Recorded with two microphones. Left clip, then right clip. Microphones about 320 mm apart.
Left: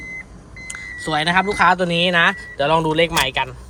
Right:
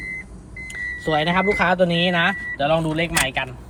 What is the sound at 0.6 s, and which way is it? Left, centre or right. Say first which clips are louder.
Speech: right 2 dB; centre.